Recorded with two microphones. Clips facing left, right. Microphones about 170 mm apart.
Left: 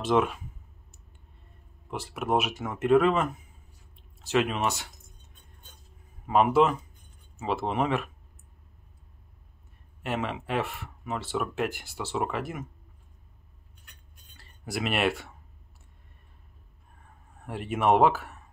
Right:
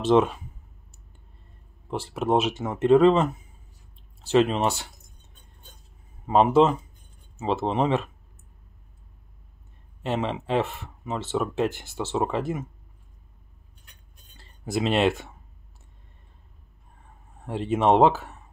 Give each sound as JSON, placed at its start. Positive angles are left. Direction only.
{"t": 0.0, "sound": "speech", "side_deg": -30}
{"t": 1.9, "sound": "speech", "side_deg": -30}
{"t": 6.2, "sound": "speech", "side_deg": -25}
{"t": 10.0, "sound": "speech", "side_deg": -25}
{"t": 14.3, "sound": "speech", "side_deg": -25}
{"t": 17.5, "sound": "speech", "side_deg": -25}